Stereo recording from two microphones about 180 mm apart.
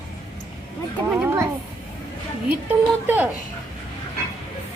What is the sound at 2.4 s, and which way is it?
Speech, 10° right (ahead or behind).